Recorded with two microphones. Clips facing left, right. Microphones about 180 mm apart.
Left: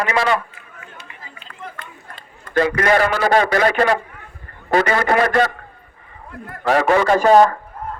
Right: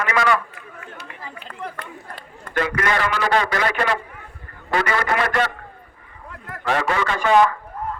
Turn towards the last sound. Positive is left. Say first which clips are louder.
# left 5 dB
turn(degrees=40)  # may be behind; listen again after turning